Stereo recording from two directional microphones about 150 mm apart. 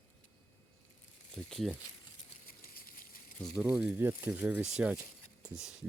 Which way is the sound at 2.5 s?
75° left (ahead or behind).